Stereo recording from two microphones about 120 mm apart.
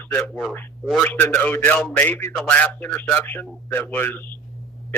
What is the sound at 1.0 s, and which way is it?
A man's voice, 15° left (ahead or behind).